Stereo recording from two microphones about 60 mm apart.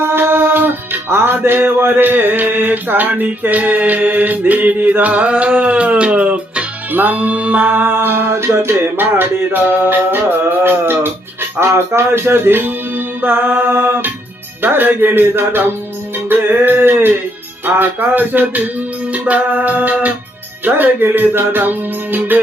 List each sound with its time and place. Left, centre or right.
0.0 s music: right
1.1 s mantra: right
7.8 s music: right
19.1 s mantra: right
20.7 s music: right